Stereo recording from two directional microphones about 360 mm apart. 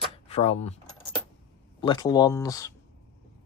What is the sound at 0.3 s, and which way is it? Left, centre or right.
Speech, centre.